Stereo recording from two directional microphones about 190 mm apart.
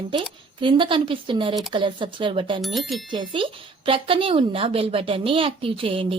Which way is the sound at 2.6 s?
Centre (ahead or behind).